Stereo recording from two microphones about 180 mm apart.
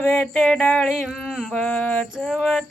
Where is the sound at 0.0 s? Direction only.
10° left (ahead or behind).